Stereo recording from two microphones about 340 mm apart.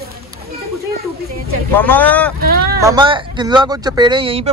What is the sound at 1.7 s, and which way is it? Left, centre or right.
Speech, centre.